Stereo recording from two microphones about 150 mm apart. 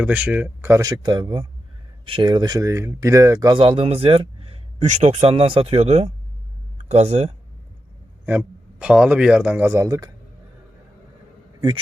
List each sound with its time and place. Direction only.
0.0 s speech: 10° right (ahead or behind)
3.6 s speech: 35° right (ahead or behind)
8.3 s speech: 10° right (ahead or behind)